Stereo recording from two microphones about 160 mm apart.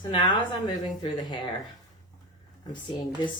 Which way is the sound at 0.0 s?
30° left (ahead or behind).